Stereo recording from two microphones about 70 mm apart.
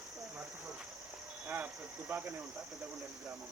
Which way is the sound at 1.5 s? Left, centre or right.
Centre.